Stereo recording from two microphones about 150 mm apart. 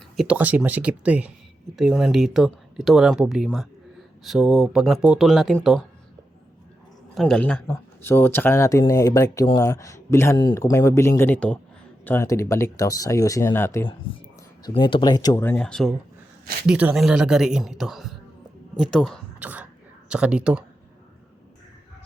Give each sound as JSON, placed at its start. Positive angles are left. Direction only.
{"t": 0.2, "sound": "speech", "side_deg": -10}
{"t": 7.1, "sound": "speech", "side_deg": 0}
{"t": 14.8, "sound": "speech", "side_deg": 30}
{"t": 15.4, "sound": "speech", "side_deg": 5}
{"t": 16.6, "sound": "speech", "side_deg": -5}
{"t": 19.4, "sound": "speech", "side_deg": -10}